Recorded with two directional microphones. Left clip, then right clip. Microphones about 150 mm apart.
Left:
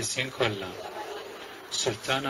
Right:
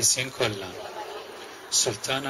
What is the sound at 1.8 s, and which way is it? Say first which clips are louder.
Speech: even; 25° right (ahead or behind).